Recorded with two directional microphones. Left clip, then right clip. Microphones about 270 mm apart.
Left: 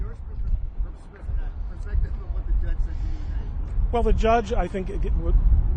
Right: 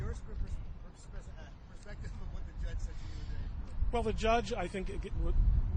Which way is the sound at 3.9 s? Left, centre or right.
Right.